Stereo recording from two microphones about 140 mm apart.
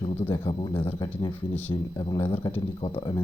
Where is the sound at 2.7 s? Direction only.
35° left (ahead or behind).